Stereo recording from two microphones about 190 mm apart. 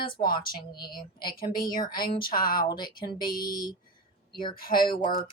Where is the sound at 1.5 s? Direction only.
50° left (ahead or behind).